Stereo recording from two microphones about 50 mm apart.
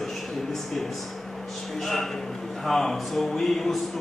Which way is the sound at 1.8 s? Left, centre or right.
Centre.